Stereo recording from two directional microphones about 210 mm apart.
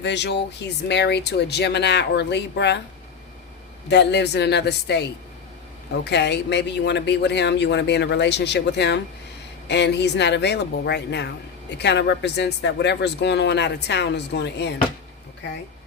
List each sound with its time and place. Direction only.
0.0 s speech: 55° left (ahead or behind)
3.8 s speech: 55° left (ahead or behind)
6.1 s speech: 55° left (ahead or behind)